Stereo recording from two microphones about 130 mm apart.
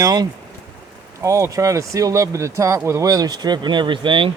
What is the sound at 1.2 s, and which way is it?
Speech, 25° right (ahead or behind).